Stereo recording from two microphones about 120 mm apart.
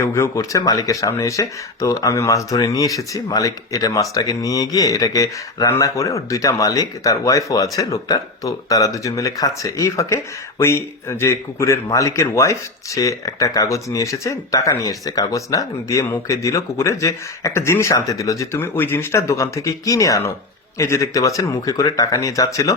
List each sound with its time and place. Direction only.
0.0 s speech: 25° left (ahead or behind)